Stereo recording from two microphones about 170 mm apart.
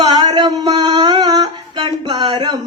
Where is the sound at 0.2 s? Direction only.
25° right (ahead or behind).